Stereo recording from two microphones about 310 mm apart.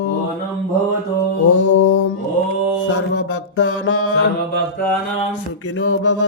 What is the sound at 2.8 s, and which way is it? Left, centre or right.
Mantra, left.